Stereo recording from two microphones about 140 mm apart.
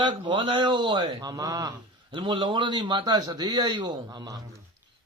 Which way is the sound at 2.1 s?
35° right (ahead or behind).